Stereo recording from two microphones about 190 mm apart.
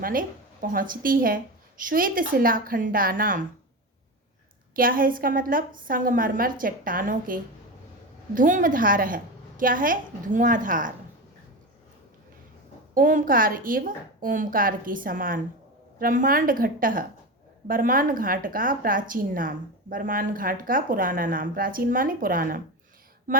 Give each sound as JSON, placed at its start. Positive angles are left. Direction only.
{"t": 0.0, "sound": "speech", "side_deg": -45}
{"t": 4.7, "sound": "speech", "side_deg": -50}
{"t": 12.9, "sound": "speech", "side_deg": -45}